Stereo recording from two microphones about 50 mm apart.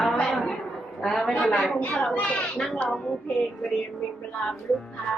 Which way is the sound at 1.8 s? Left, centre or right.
Left.